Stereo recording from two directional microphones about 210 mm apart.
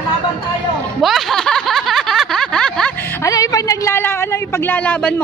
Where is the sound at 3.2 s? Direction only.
15° left (ahead or behind).